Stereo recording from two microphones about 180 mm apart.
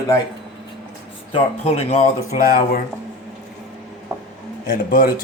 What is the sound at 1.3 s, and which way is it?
Speech, 35° left (ahead or behind).